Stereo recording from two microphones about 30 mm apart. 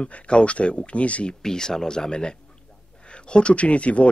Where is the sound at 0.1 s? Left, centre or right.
Left.